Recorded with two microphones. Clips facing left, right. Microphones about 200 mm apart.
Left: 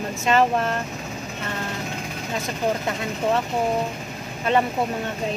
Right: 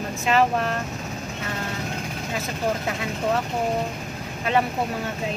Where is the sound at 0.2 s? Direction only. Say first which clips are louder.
Left 1 dB; centre (ahead or behind).